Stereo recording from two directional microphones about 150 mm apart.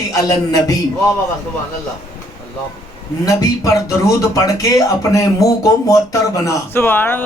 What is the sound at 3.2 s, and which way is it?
Speech, 20° left (ahead or behind).